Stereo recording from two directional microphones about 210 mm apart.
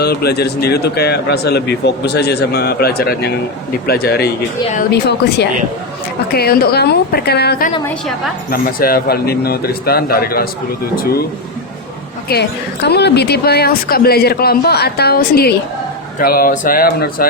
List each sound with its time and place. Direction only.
0.0 s a man's voice: 50° left (ahead or behind)
12.3 s a man's voice: 50° left (ahead or behind)